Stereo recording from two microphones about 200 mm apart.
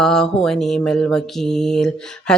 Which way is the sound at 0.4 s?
Centre (ahead or behind).